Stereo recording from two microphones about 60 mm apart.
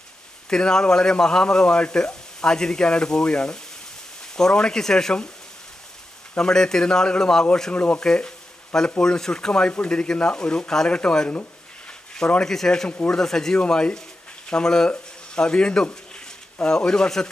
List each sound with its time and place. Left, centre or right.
0.5 s speech: centre
6.3 s speech: centre